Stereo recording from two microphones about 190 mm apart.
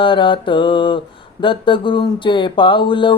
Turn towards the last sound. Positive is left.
turn(degrees=25)  # may be behind; listen again after turning